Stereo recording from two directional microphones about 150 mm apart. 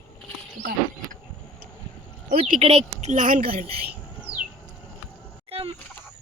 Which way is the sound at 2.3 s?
45° right (ahead or behind).